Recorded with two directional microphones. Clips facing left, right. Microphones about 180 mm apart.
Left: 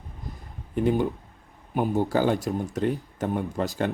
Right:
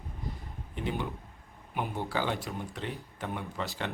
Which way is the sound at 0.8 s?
45° left (ahead or behind).